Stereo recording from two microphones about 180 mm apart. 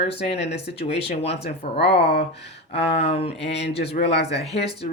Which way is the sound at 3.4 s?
70° left (ahead or behind).